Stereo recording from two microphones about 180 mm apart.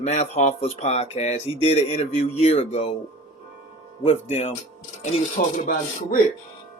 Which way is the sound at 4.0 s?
35° left (ahead or behind).